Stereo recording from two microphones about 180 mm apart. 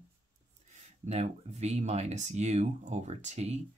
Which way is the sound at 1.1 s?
40° right (ahead or behind).